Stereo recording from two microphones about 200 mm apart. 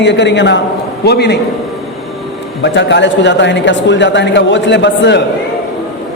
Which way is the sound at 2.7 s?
60° left (ahead or behind).